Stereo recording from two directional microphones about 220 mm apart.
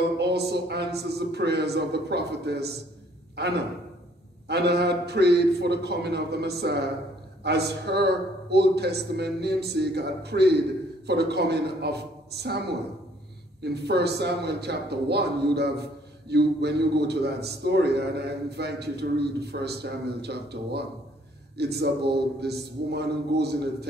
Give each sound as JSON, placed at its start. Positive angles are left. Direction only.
{"t": 0.2, "sound": "a man's voice", "side_deg": -50}